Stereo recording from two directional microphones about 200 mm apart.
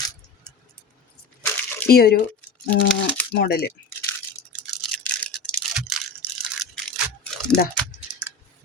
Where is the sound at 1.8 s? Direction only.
50° left (ahead or behind).